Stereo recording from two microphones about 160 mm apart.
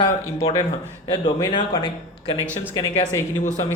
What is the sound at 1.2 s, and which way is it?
Speech, 30° left (ahead or behind).